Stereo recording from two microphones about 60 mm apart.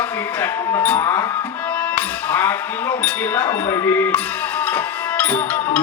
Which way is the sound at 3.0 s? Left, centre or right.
Left.